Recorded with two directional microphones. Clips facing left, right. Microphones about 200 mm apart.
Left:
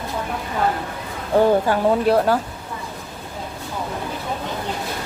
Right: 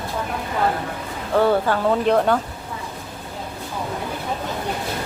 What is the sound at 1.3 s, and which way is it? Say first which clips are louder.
Speech: left 2 dB; 15° left (ahead or behind).